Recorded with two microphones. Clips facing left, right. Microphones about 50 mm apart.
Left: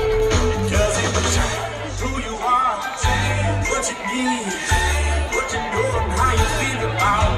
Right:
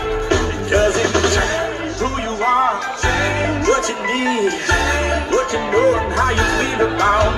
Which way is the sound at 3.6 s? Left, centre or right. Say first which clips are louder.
Right 6 dB; right.